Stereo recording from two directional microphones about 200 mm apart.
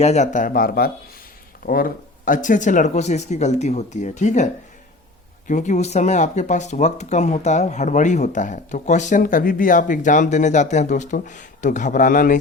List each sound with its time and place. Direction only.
0.0 s speech: 35° left (ahead or behind)
5.5 s speech: 40° left (ahead or behind)